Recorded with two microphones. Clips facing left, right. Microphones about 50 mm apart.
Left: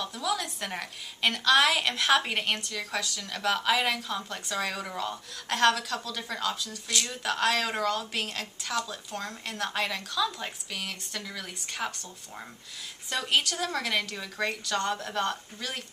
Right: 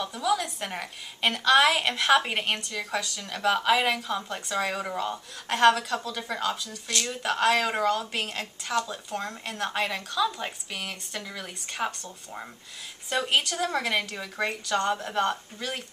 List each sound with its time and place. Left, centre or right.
0.0 s a woman's voice: centre